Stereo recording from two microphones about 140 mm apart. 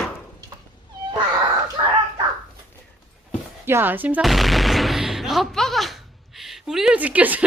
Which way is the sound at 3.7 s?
15° right (ahead or behind).